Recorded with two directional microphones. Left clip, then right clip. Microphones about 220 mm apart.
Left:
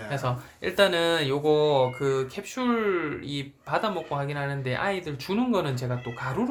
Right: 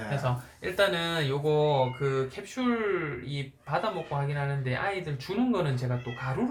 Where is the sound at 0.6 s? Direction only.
50° left (ahead or behind).